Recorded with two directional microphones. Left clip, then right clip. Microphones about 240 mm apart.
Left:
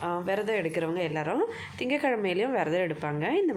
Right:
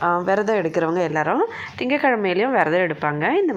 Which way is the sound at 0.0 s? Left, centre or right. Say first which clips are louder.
Right 10 dB; centre.